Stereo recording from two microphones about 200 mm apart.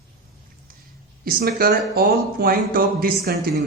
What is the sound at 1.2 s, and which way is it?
Speech, 50° right (ahead or behind).